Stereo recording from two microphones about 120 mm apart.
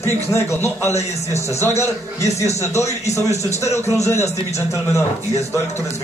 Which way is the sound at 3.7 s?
25° left (ahead or behind).